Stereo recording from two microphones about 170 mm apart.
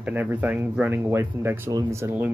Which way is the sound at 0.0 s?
10° right (ahead or behind).